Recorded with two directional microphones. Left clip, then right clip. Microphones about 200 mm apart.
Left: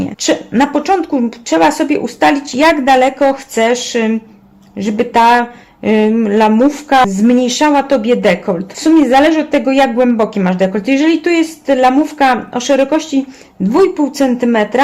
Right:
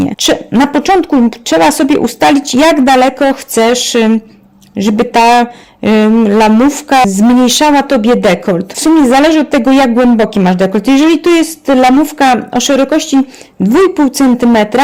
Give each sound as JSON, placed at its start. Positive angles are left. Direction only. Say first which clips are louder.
{"t": 0.0, "sound": "speech", "louder": "right 4 dB", "side_deg": -45}
{"t": 13.9, "sound": "speech", "louder": "right 4 dB", "side_deg": -50}